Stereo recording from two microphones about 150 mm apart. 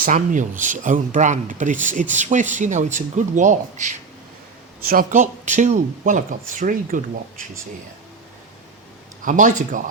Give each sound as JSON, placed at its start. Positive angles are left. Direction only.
{"t": 0.0, "sound": "speech", "side_deg": -60}
{"t": 9.2, "sound": "speech", "side_deg": -60}